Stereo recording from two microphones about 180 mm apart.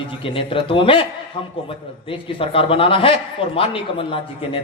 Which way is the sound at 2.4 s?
30° left (ahead or behind).